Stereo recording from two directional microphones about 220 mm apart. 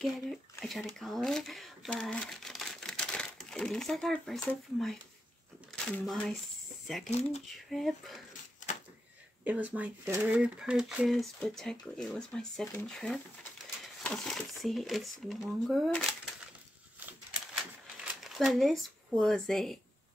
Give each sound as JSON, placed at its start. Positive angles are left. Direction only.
{"t": 0.0, "sound": "speech", "side_deg": 0}
{"t": 7.1, "sound": "speech", "side_deg": 30}
{"t": 7.4, "sound": "speech", "side_deg": 0}
{"t": 9.4, "sound": "speech", "side_deg": -5}
{"t": 18.0, "sound": "speech", "side_deg": 0}